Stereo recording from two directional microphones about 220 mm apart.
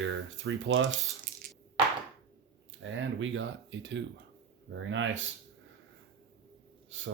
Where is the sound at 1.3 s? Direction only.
40° right (ahead or behind).